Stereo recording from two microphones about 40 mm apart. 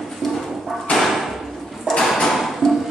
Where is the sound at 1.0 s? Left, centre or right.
Centre.